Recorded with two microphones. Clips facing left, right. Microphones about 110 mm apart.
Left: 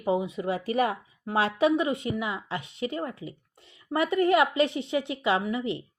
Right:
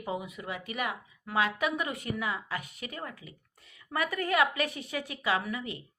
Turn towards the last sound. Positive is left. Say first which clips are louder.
# left 5 dB
turn(degrees=25)  # may be behind; listen again after turning